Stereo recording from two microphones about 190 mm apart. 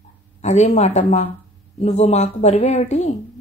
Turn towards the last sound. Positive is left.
turn(degrees=35)  # may be behind; listen again after turning